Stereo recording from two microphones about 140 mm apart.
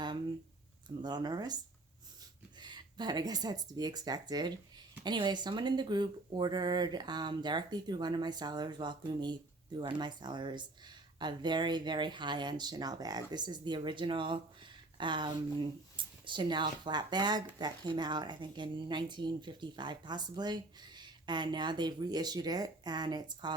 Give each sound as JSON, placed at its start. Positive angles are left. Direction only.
{"t": 0.9, "sound": "speech", "side_deg": -30}
{"t": 2.6, "sound": "speech", "side_deg": -30}